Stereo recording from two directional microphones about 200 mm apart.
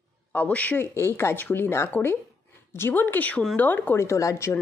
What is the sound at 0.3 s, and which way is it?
Speech, 5° left (ahead or behind).